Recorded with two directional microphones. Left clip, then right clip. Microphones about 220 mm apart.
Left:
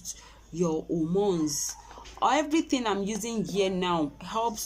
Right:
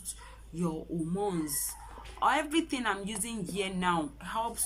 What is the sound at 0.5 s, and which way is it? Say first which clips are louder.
A woman's voice: left 8 dB; 15° left (ahead or behind).